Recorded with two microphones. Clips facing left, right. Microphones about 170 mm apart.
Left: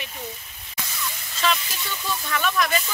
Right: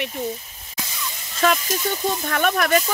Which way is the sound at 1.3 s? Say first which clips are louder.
Right 5 dB; 45° right (ahead or behind).